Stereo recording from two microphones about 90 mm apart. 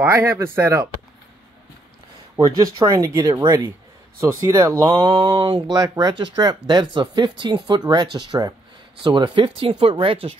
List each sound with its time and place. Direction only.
0.1 s speech: 30° right (ahead or behind)
2.3 s speech: 40° right (ahead or behind)
4.9 s speech: 55° right (ahead or behind); by 10.3 s 85° right